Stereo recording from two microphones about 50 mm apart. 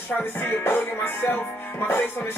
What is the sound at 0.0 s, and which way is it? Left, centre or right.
Music, left.